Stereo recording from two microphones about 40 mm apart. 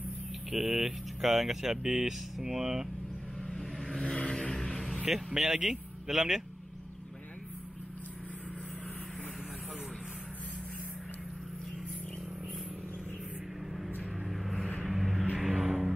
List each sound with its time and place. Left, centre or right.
0.5 s speech: centre
3.4 s vehicle: centre
5.0 s a man's voice: centre
14.2 s vehicle: centre